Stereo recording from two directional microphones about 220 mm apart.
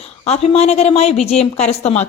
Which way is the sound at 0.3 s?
30° left (ahead or behind).